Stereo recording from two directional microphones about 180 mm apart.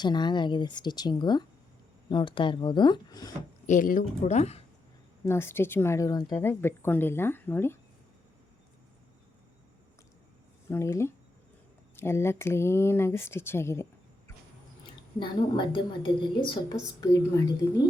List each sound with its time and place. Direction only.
0.0 s speech: 25° left (ahead or behind)
3.7 s speech: 45° left (ahead or behind)
5.2 s a woman's voice: 15° left (ahead or behind)
10.7 s a woman's voice: 15° left (ahead or behind)
14.8 s a woman's voice: 25° left (ahead or behind)